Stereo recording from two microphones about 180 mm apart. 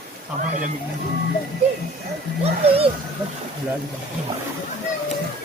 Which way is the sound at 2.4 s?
30° right (ahead or behind).